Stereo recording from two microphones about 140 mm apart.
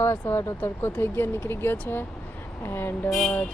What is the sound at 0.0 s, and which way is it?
Speech, 15° left (ahead or behind).